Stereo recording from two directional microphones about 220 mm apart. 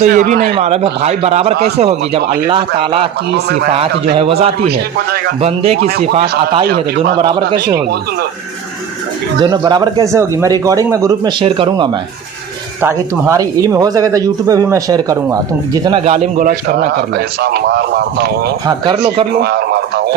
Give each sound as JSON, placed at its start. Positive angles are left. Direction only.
{"t": 0.0, "sound": "a man's voice", "side_deg": -35}
{"t": 9.4, "sound": "speech", "side_deg": -20}
{"t": 12.8, "sound": "speech", "side_deg": -15}
{"t": 16.0, "sound": "a man's voice", "side_deg": -35}
{"t": 17.4, "sound": "speech", "side_deg": -50}
{"t": 18.7, "sound": "speech", "side_deg": -20}
{"t": 19.4, "sound": "speech", "side_deg": -50}